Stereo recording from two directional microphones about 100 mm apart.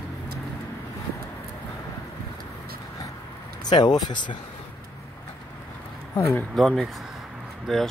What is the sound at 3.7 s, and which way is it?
Speech, 45° left (ahead or behind).